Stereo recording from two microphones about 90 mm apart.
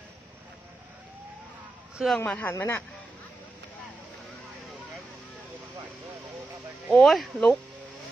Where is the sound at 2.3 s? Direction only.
20° left (ahead or behind).